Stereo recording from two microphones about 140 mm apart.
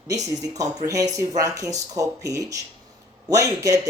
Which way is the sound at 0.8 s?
25° right (ahead or behind).